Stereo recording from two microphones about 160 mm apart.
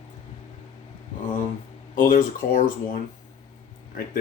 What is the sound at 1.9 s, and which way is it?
Speech, 55° left (ahead or behind).